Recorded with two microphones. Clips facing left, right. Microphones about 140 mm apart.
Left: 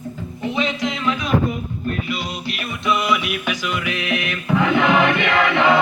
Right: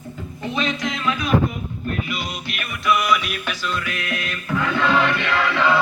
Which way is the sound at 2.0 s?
30° left (ahead or behind).